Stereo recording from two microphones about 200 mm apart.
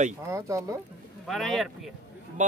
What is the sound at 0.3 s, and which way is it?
Speech, 15° right (ahead or behind).